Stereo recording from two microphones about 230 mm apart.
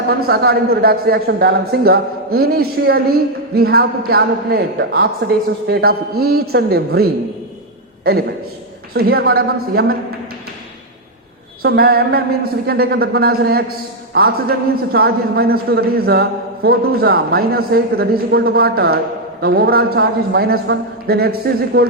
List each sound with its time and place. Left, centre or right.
0.1 s a man's voice: right
8.9 s speech: right
11.6 s a man's voice: right